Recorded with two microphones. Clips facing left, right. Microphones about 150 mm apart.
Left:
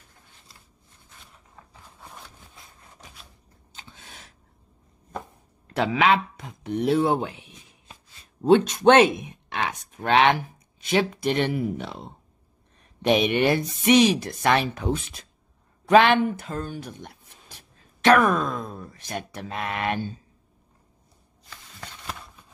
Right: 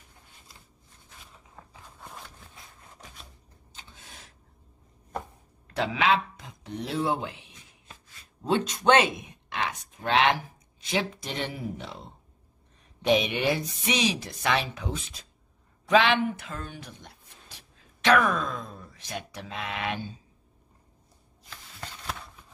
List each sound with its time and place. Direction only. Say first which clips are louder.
1.6 s a sound: right 1 dB; centre (ahead or behind)
5.7 s speech: left 4 dB; 60° left (ahead or behind)
8.5 s speech: left 7 dB; 60° left (ahead or behind)
10.9 s speech: left 7 dB; 65° left (ahead or behind)
13.0 s speech: left 4 dB; 60° left (ahead or behind); by 16.9 s 40° left (ahead or behind)
17.6 s a sound: left 4 dB; 50° left (ahead or behind)